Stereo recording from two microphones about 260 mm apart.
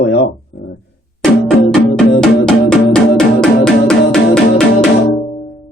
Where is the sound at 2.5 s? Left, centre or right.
Centre.